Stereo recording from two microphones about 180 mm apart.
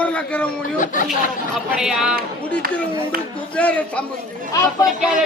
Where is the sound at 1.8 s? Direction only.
5° right (ahead or behind).